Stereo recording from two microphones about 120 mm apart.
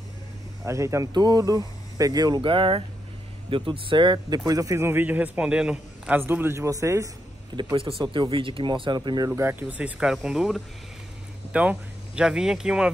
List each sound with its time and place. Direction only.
0.7 s a man's voice: 25° right (ahead or behind); by 4.4 s 40° right (ahead or behind)
4.5 s a man's voice: 30° right (ahead or behind)
7.7 s speech: 50° right (ahead or behind)
9.3 s speech: 20° right (ahead or behind)